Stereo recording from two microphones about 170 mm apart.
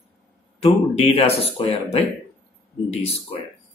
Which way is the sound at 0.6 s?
35° left (ahead or behind).